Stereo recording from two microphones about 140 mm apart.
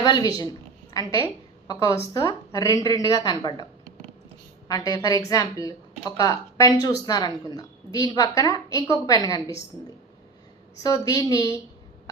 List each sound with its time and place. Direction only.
0.0 s a woman's voice: 30° left (ahead or behind)
4.7 s a woman's voice: 25° left (ahead or behind)
10.8 s a woman's voice: 25° left (ahead or behind)